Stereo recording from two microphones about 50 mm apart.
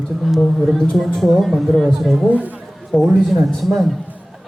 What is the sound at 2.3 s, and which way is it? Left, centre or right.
Speech, right.